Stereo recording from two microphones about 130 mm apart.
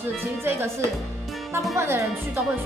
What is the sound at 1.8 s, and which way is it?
Speech, 20° right (ahead or behind).